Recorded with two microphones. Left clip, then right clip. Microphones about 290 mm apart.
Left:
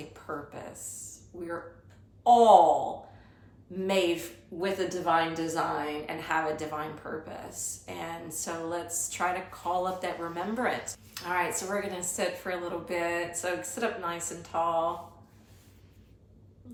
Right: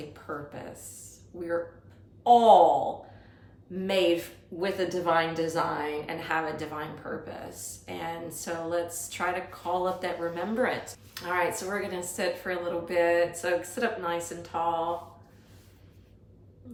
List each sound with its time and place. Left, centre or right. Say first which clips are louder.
0.1 s a woman's voice: right 1 dB; centre
3.8 s a woman's voice: right 2 dB; centre